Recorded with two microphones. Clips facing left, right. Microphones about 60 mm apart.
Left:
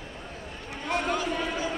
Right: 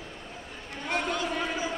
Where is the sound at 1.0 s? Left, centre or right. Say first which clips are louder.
Left 2 dB; centre.